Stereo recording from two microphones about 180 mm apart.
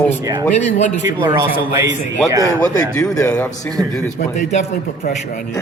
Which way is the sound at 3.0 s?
15° left (ahead or behind).